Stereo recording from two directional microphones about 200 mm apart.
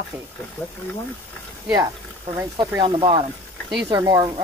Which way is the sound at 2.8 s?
25° right (ahead or behind).